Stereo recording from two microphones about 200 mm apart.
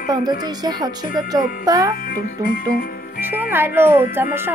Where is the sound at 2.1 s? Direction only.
45° left (ahead or behind).